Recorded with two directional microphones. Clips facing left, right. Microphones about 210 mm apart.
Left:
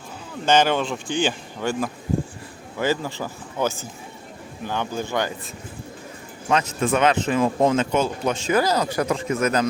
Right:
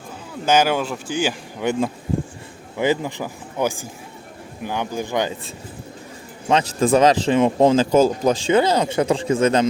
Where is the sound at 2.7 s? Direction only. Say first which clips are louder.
Right 3 dB; 15° right (ahead or behind).